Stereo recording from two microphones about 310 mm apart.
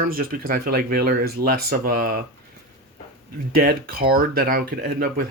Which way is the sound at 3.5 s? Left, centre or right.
Right.